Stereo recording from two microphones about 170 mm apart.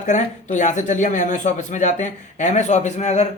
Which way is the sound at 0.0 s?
45° left (ahead or behind).